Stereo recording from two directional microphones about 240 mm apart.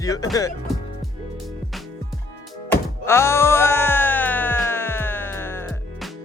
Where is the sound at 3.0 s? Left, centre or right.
Centre.